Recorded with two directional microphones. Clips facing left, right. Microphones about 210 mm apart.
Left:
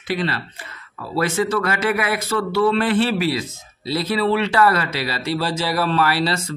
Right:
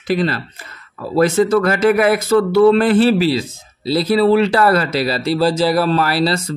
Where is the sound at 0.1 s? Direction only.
40° right (ahead or behind).